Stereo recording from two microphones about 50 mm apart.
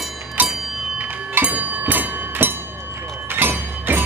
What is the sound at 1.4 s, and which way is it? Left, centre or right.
Train, right.